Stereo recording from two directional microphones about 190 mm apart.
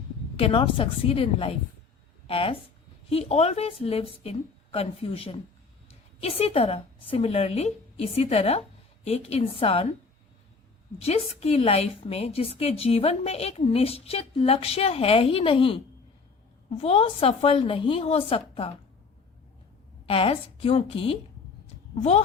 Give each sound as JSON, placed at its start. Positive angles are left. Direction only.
{"t": 0.3, "sound": "a woman's voice", "side_deg": 30}
{"t": 11.0, "sound": "a woman's voice", "side_deg": 35}
{"t": 20.1, "sound": "a woman's voice", "side_deg": 30}